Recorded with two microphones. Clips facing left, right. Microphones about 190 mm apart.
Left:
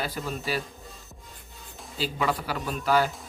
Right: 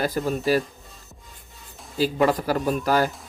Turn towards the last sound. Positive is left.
turn(degrees=-45)  # may be behind; listen again after turning